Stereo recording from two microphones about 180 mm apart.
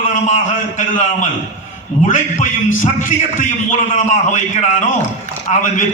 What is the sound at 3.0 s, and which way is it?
A man's voice, 45° left (ahead or behind).